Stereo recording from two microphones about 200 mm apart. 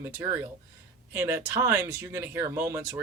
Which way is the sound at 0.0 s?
10° right (ahead or behind).